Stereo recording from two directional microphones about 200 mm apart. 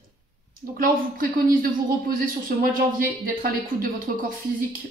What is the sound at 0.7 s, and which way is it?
Speech, 45° right (ahead or behind).